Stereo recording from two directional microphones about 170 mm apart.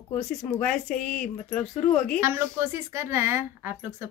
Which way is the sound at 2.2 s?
15° right (ahead or behind).